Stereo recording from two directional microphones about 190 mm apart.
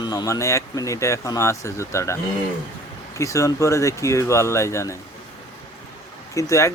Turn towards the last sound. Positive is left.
turn(degrees=15)  # may be behind; listen again after turning